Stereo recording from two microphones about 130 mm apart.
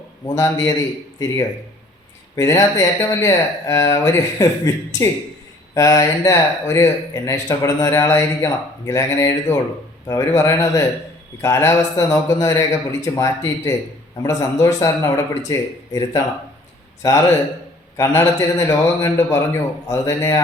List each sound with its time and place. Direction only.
0.3 s speech: 20° left (ahead or behind)
2.3 s speech: 25° left (ahead or behind)